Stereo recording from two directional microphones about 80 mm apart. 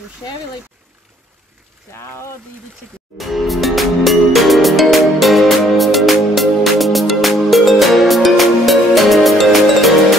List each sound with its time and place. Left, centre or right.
2.0 s speech: left
3.2 s music: centre